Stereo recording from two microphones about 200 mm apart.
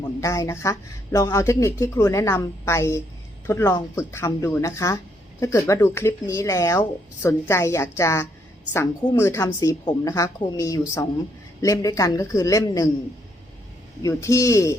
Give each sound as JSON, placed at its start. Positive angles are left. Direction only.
{"t": 0.0, "sound": "speech", "side_deg": 15}
{"t": 14.0, "sound": "speech", "side_deg": 15}